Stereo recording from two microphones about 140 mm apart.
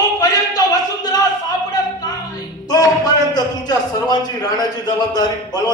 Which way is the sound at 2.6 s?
30° left (ahead or behind).